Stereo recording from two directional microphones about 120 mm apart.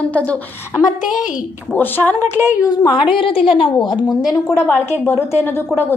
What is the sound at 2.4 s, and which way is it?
A woman's voice, 30° left (ahead or behind).